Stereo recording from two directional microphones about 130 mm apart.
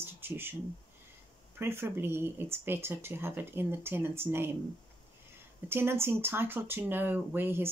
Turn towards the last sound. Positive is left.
turn(degrees=-15)  # may be behind; listen again after turning